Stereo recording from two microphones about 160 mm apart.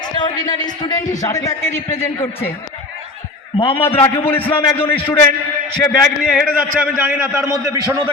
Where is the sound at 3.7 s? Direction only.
15° left (ahead or behind).